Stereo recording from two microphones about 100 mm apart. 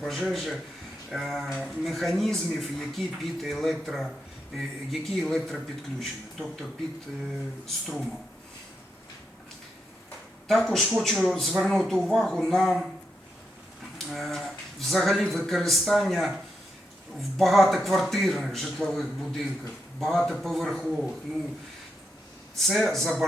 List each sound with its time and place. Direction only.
0.0 s speech: centre (ahead or behind)
10.5 s speech: 5° left (ahead or behind)
14.1 s speech: centre (ahead or behind)
22.5 s speech: centre (ahead or behind)